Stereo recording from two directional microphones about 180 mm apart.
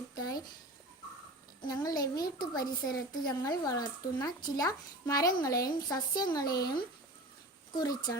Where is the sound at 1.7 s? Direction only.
20° left (ahead or behind).